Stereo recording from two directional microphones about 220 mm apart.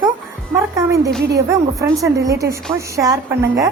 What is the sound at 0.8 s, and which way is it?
Speech, 15° right (ahead or behind).